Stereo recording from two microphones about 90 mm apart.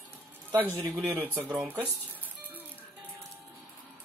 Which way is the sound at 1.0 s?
25° right (ahead or behind).